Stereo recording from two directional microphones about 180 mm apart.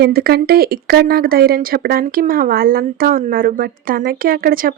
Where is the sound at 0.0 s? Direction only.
60° right (ahead or behind).